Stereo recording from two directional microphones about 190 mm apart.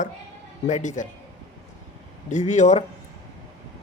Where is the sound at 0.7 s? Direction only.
40° left (ahead or behind).